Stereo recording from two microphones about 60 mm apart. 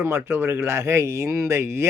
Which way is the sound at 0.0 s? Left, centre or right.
Right.